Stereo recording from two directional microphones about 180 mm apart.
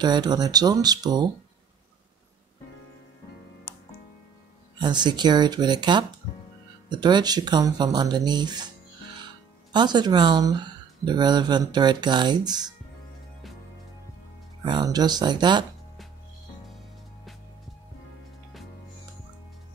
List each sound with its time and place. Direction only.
0.0 s speech: 25° right (ahead or behind)
4.7 s speech: 25° right (ahead or behind)
9.7 s speech: 25° right (ahead or behind)
14.6 s speech: 25° right (ahead or behind)